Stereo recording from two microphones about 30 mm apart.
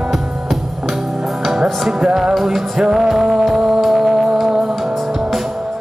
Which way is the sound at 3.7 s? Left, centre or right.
Centre.